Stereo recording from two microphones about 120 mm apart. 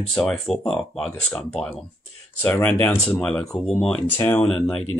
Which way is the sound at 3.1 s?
5° left (ahead or behind).